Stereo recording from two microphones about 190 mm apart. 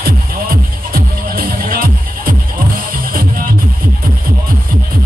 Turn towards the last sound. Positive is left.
turn(degrees=-50)  # may be behind; listen again after turning